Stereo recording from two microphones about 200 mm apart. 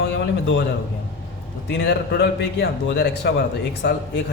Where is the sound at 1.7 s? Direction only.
60° left (ahead or behind).